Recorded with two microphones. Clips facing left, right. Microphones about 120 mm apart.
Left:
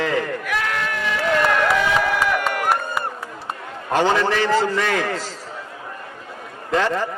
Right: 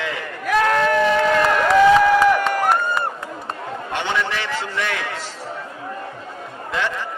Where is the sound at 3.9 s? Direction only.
40° left (ahead or behind).